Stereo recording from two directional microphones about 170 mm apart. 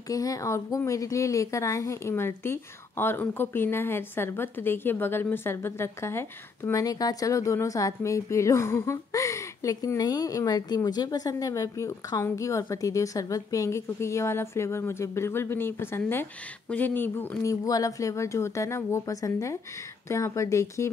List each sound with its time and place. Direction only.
0.1 s speech: 20° left (ahead or behind)